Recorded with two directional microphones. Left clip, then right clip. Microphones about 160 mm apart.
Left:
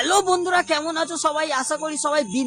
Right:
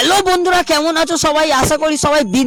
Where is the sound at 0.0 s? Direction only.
55° right (ahead or behind).